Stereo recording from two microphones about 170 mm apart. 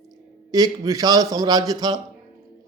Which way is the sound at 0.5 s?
20° right (ahead or behind).